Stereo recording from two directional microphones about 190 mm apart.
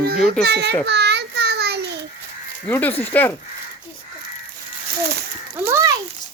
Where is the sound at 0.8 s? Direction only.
60° right (ahead or behind).